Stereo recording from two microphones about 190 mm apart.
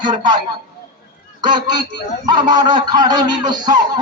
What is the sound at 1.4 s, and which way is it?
A man's voice, 25° right (ahead or behind).